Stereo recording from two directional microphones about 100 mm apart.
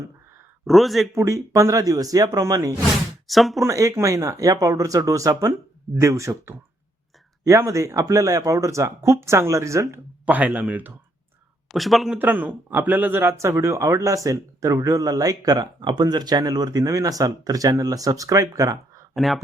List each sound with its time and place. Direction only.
0.7 s speech: centre (ahead or behind)
1.1 s speech: 30° right (ahead or behind)
3.2 s speech: centre (ahead or behind)
3.6 s a woman's voice: 30° right (ahead or behind)
10.2 s speech: 15° right (ahead or behind)
11.7 s speech: centre (ahead or behind)
12.2 s speech: 15° right (ahead or behind); by 19.0 s 35° right (ahead or behind)
19.1 s speech: centre (ahead or behind)